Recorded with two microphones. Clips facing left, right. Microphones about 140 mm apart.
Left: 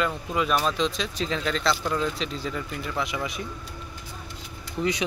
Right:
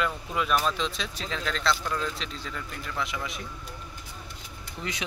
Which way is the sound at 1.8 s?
15° left (ahead or behind).